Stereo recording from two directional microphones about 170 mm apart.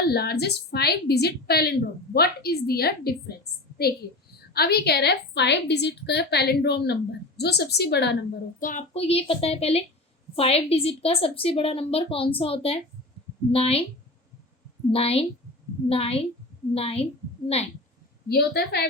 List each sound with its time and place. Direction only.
0.0 s a woman's voice: 70° left (ahead or behind)
8.5 s speech: 55° left (ahead or behind)
8.9 s a woman's voice: 35° left (ahead or behind)
14.8 s a woman's voice: 35° left (ahead or behind)
18.3 s a woman's voice: 70° left (ahead or behind)